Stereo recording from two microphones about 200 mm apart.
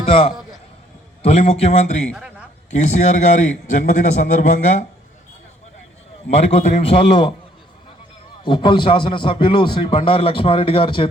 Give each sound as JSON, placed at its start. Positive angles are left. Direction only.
{"t": 0.0, "sound": "a man's voice", "side_deg": 30}
{"t": 2.0, "sound": "a sound", "side_deg": -5}
{"t": 2.6, "sound": "a man's voice", "side_deg": 35}
{"t": 6.5, "sound": "a man's voice", "side_deg": 30}
{"t": 8.4, "sound": "a man's voice", "side_deg": 25}